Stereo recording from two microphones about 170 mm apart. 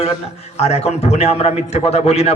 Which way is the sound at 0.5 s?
40° left (ahead or behind).